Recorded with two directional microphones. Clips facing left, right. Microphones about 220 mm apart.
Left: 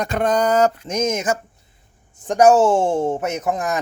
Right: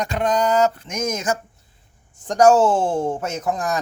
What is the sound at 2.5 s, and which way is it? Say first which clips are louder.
Speech: left 2 dB; 15° left (ahead or behind).